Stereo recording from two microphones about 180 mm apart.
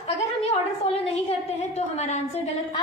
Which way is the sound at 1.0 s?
35° left (ahead or behind).